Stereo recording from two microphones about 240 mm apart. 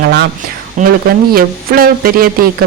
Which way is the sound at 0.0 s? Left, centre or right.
Right.